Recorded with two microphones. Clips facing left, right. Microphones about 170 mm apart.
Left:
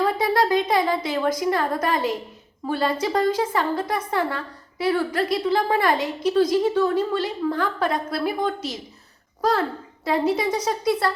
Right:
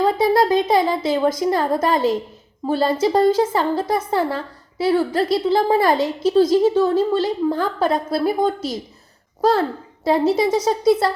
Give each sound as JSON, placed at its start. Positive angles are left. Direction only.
{"t": 0.0, "sound": "a woman's voice", "side_deg": -25}